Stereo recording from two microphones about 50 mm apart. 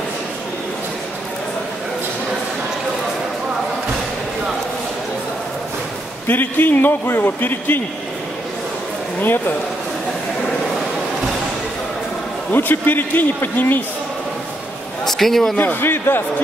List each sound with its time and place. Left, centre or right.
6.2 s a man's voice: left
12.5 s a man's voice: left
15.0 s a man's voice: centre
15.5 s a man's voice: left